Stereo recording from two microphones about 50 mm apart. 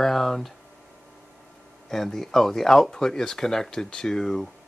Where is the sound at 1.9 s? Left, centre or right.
Centre.